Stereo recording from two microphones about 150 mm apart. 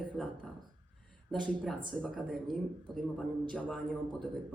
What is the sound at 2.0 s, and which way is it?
A man's voice, 5° left (ahead or behind).